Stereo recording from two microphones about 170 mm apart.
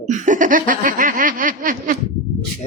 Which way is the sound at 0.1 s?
50° right (ahead or behind).